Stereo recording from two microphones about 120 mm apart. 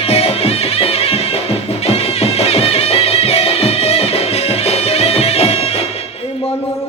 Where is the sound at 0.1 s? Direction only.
55° left (ahead or behind).